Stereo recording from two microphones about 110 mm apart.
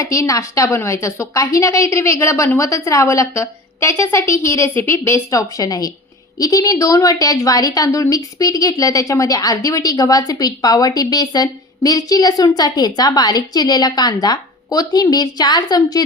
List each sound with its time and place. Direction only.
0.0 s a woman's voice: 30° left (ahead or behind)